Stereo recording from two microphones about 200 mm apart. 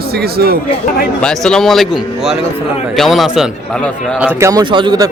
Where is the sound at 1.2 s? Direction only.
5° left (ahead or behind).